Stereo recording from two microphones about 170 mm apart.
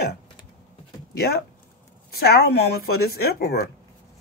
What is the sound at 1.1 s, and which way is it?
Speech, 70° left (ahead or behind).